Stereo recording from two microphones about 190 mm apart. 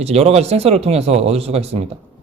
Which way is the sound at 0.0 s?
35° right (ahead or behind).